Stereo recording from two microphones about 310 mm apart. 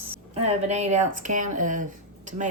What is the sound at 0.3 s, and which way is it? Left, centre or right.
A woman's voice, right.